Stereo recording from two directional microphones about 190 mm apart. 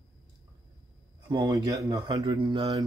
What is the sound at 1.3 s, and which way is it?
Speech, 20° right (ahead or behind).